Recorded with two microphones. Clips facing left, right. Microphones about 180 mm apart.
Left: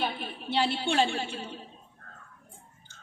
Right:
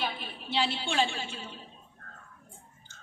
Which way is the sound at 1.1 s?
55° left (ahead or behind).